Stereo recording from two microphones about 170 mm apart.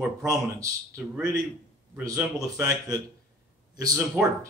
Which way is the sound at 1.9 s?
20° right (ahead or behind).